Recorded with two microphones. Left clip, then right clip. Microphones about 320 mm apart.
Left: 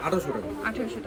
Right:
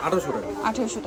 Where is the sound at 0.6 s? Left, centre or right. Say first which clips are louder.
Right 6 dB; centre.